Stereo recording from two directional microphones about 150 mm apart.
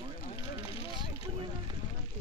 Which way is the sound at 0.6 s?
40° left (ahead or behind).